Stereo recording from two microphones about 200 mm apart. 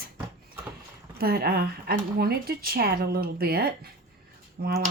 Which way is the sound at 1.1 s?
50° right (ahead or behind).